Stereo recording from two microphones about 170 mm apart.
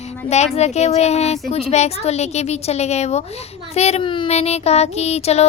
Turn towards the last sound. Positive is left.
turn(degrees=40)  # may be behind; listen again after turning